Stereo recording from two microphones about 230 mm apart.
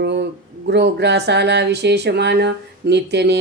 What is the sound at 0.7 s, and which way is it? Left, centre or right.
Speech, right.